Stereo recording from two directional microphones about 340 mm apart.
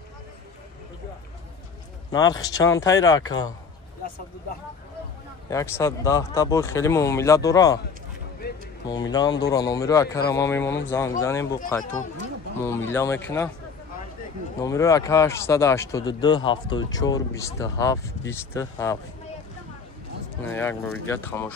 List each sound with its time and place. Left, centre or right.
2.0 s speech: centre
5.5 s speech: centre
8.4 s a sound: left
8.8 s speech: centre
12.6 s speech: centre
14.6 s speech: centre
20.4 s speech: centre